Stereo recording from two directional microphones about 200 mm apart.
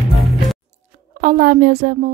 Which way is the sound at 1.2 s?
45° right (ahead or behind).